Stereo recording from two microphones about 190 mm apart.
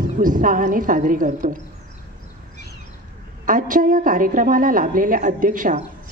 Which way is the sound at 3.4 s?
45° right (ahead or behind).